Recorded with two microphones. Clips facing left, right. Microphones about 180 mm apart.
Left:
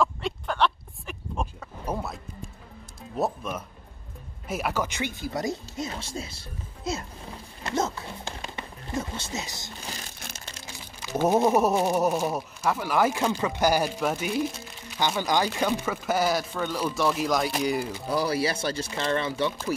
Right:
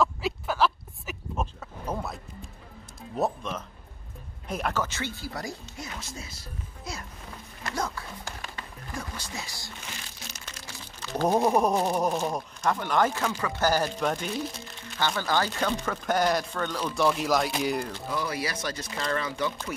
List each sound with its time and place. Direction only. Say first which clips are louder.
0.0 s a sound: even; 5° right (ahead or behind)
1.9 s music: left 1 dB; 5° left (ahead or behind)
3.2 s speech: even; 10° left (ahead or behind); by 7.1 s 25° left (ahead or behind)
7.6 s a sound: left 4 dB; 25° left (ahead or behind)
9.8 s crumpling: left 4 dB; 35° left (ahead or behind)
11.0 s speech: left 2 dB; 10° left (ahead or behind)
18.1 s speech: left 6 dB; 35° left (ahead or behind)